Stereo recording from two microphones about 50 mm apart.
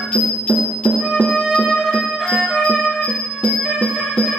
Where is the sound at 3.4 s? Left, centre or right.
Left.